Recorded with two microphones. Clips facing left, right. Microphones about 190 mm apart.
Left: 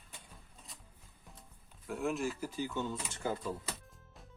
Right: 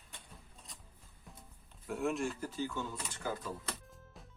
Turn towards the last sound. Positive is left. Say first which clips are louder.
# right 2 dB
turn(degrees=0)  # may be behind; listen again after turning